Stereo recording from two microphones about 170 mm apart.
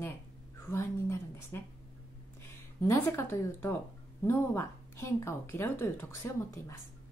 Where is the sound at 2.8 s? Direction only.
15° left (ahead or behind).